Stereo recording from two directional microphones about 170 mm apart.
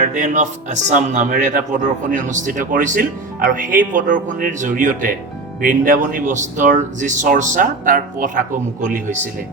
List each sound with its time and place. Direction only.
0.1 s speech: 50° right (ahead or behind)